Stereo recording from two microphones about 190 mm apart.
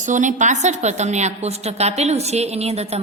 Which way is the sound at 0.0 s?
40° right (ahead or behind).